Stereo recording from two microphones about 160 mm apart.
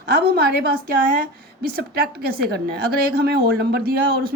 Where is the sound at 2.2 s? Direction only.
70° right (ahead or behind).